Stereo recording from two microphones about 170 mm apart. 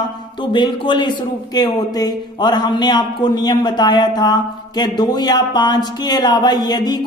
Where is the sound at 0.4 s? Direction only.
30° left (ahead or behind).